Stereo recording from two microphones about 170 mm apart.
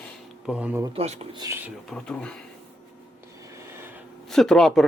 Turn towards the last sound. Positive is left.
turn(degrees=0)  # may be behind; listen again after turning